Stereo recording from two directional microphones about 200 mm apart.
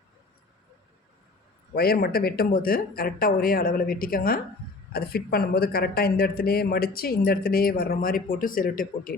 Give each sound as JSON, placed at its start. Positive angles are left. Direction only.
{"t": 1.7, "sound": "speech", "side_deg": 50}